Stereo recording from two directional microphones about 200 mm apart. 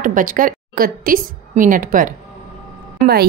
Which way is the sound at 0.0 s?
40° right (ahead or behind).